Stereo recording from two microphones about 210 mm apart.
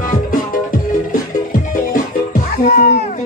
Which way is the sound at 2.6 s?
45° left (ahead or behind).